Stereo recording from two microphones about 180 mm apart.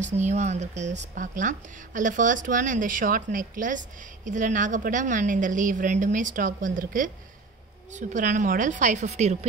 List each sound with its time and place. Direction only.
0.0 s speech: 40° right (ahead or behind)